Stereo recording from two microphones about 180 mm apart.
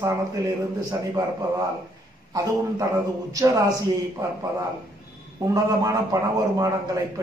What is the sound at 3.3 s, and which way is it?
Speech, 20° right (ahead or behind).